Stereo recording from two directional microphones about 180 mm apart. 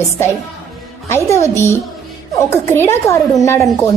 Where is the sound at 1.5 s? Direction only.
15° left (ahead or behind).